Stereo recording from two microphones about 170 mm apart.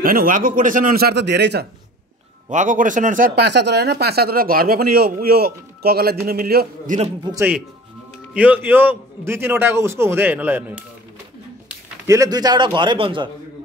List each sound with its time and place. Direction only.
0.0 s speech: 55° right (ahead or behind); by 1.7 s 85° right
2.5 s speech: 50° right (ahead or behind)
8.3 s a man's voice: 10° right (ahead or behind)
12.1 s a man's voice: 20° right (ahead or behind)